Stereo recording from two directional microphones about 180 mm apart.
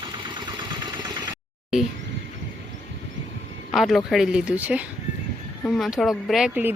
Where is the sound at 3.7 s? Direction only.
Centre (ahead or behind).